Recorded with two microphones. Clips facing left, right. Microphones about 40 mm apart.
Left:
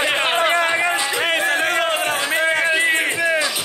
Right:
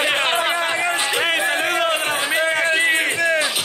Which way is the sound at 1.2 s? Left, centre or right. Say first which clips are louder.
Left 3 dB; centre.